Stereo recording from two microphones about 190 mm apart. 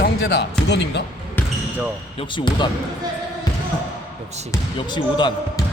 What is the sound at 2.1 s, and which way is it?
Speech, 25° left (ahead or behind).